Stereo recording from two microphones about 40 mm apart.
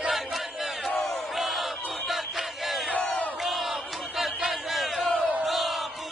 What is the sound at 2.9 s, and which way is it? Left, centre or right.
Crowd, left.